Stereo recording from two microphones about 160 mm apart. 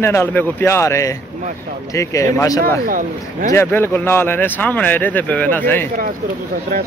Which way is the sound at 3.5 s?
15° left (ahead or behind).